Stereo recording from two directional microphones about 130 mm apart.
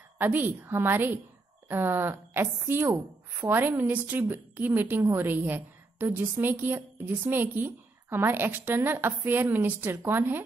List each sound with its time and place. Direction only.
0.2 s a woman's voice: 15° right (ahead or behind)